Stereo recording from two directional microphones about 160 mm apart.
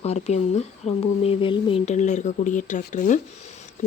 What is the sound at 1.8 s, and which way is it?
Speech, 45° left (ahead or behind).